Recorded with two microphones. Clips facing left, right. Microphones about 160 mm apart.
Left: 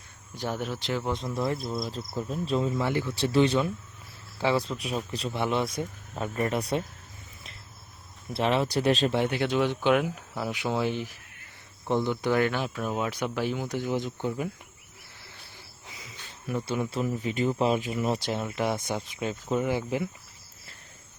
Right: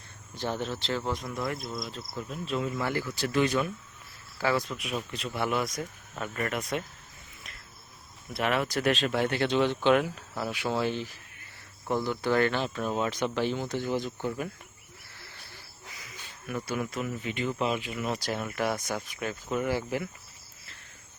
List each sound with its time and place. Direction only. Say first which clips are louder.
0.3 s speech: even; 10° left (ahead or behind)
1.2 s speech: left 4 dB; 30° left (ahead or behind)
8.3 s speech: left 3 dB; 30° left (ahead or behind)
9.1 s speech: left 1 dB; 15° left (ahead or behind)
16.0 s cricket: left 2 dB; 25° left (ahead or behind)
16.6 s speech: left 3 dB; 25° left (ahead or behind)
18.0 s speech: left 3 dB; 25° left (ahead or behind)